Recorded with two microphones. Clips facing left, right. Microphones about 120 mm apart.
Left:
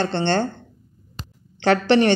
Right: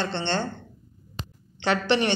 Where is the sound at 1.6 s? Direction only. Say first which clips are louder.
Left 6 dB; 50° left (ahead or behind).